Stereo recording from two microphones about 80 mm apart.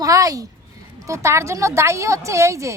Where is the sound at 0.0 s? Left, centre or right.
Right.